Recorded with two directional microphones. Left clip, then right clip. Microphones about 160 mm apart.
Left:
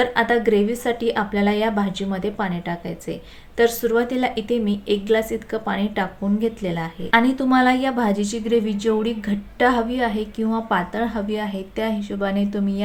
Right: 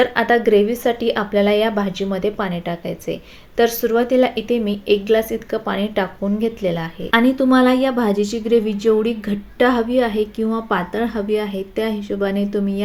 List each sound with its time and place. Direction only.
0.0 s speech: centre (ahead or behind)